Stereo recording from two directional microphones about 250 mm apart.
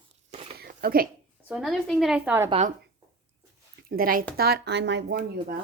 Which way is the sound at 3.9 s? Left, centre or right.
Right.